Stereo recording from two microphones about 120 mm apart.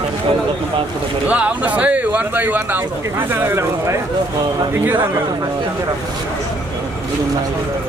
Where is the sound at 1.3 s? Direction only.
10° right (ahead or behind).